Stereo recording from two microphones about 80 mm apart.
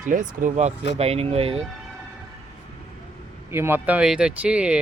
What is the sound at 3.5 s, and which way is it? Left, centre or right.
Speech, right.